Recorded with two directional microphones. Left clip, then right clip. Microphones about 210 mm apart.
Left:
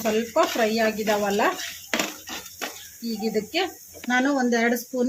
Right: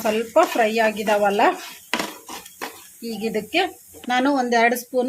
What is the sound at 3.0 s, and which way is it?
Speech, 55° right (ahead or behind).